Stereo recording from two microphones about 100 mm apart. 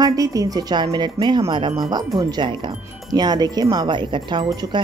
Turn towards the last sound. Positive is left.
turn(degrees=-55)  # may be behind; listen again after turning